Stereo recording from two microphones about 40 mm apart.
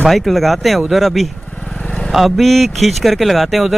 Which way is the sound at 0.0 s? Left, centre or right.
Centre.